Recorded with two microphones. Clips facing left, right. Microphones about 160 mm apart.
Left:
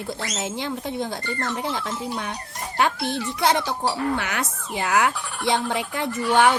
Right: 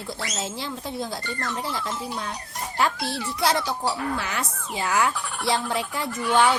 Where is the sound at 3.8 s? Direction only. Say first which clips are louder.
Left 3 dB; 85° left.